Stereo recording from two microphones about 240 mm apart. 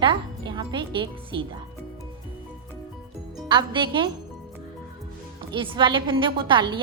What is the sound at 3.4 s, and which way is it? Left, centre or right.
Speech, centre.